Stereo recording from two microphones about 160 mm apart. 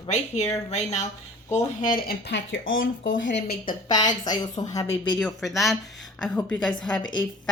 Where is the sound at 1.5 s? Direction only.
55° left (ahead or behind); by 3.7 s 75° left (ahead or behind).